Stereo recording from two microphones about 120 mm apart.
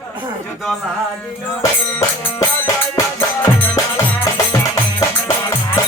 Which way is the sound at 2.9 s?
25° left (ahead or behind).